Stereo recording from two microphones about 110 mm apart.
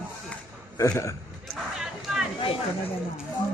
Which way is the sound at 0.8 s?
30° left (ahead or behind).